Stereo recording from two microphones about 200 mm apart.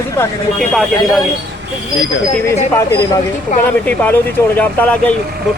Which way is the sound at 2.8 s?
20° left (ahead or behind).